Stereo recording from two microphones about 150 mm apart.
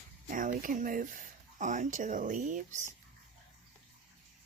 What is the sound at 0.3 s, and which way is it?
Speech, 60° right (ahead or behind).